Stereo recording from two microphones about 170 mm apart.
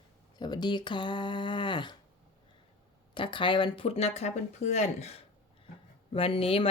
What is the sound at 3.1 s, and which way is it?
Speech, 30° left (ahead or behind).